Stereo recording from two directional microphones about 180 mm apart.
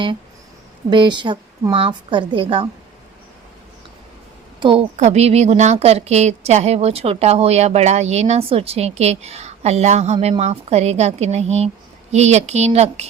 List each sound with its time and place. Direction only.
0.9 s a woman's voice: 25° right (ahead or behind)
4.6 s a woman's voice: 30° right (ahead or behind)